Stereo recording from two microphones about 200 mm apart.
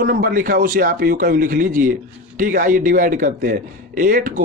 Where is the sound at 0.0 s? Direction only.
45° right (ahead or behind).